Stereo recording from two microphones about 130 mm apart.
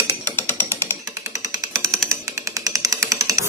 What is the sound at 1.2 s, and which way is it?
Jackhammer, 25° right (ahead or behind).